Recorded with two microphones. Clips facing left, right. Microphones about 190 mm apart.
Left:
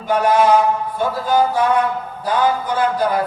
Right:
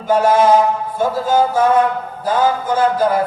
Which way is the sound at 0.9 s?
45° right (ahead or behind).